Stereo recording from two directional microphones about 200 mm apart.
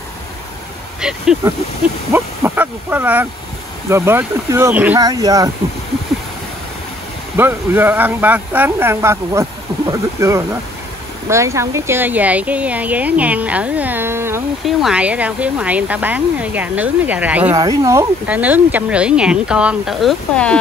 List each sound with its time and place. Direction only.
1.0 s speech: 5° right (ahead or behind)
7.3 s speech: 10° right (ahead or behind)
14.6 s speech: centre (ahead or behind)